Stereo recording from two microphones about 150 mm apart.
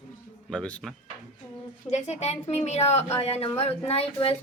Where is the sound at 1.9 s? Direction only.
50° left (ahead or behind).